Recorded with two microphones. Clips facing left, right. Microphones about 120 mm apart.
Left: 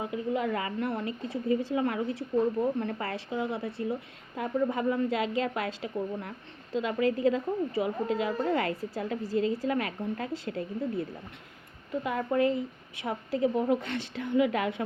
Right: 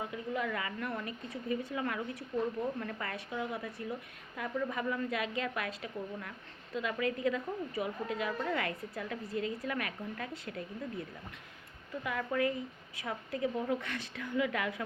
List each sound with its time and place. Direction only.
0.0 s a woman's voice: 25° left (ahead or behind)